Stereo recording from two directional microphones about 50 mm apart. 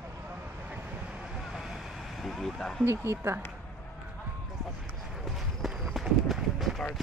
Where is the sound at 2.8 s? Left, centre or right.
Right.